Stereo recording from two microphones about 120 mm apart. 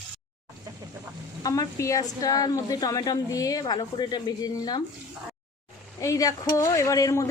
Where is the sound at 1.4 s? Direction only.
30° left (ahead or behind).